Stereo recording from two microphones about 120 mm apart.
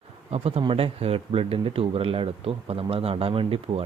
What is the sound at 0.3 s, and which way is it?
Speech, 55° right (ahead or behind).